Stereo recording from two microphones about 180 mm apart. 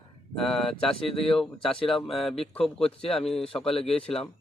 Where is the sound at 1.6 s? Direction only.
30° left (ahead or behind).